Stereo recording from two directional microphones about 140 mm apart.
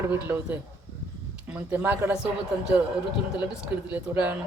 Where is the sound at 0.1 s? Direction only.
15° right (ahead or behind).